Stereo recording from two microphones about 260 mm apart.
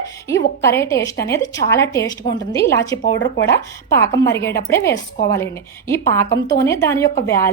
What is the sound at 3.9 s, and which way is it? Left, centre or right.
Speech, centre.